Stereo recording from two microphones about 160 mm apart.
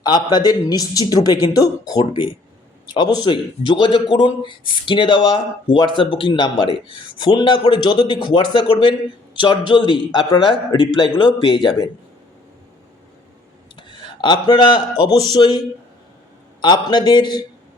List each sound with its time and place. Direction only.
0.0 s speech: 25° left (ahead or behind)
13.7 s speech: 30° left (ahead or behind)